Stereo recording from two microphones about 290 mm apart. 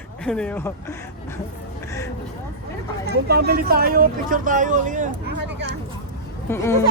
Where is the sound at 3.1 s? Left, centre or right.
Right.